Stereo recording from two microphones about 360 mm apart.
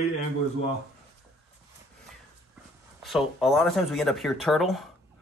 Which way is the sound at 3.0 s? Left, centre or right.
Centre.